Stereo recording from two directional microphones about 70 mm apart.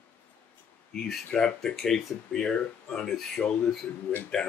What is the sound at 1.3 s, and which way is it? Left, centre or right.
A man's voice, centre.